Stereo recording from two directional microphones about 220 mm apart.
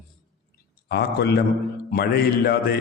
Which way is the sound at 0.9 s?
45° left (ahead or behind).